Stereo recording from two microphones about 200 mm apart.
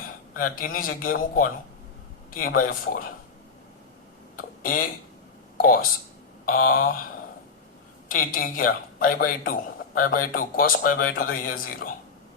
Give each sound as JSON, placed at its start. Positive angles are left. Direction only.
{"t": 0.3, "sound": "speech", "side_deg": 45}
{"t": 2.6, "sound": "speech", "side_deg": 45}
{"t": 4.4, "sound": "speech", "side_deg": 45}
{"t": 8.0, "sound": "speech", "side_deg": 45}